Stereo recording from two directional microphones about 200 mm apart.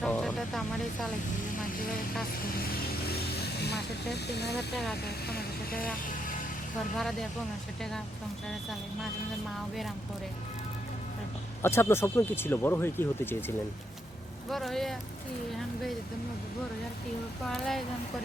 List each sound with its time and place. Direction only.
0.0 s vehicle: 5° left (ahead or behind)
3.2 s speech: 55° left (ahead or behind)
4.5 s speech: centre (ahead or behind)
5.8 s speech: 45° left (ahead or behind)
6.9 s speech: centre (ahead or behind)
11.6 s speech: 10° left (ahead or behind)
14.5 s speech: centre (ahead or behind)
17.4 s speech: centre (ahead or behind)